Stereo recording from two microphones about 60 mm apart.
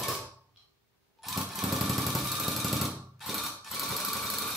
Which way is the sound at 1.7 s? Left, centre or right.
Centre.